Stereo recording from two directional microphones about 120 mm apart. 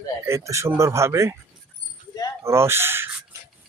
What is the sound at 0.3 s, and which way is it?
Speech, 25° right (ahead or behind).